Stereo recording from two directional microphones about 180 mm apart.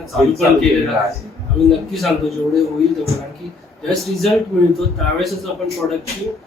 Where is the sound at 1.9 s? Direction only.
Centre (ahead or behind).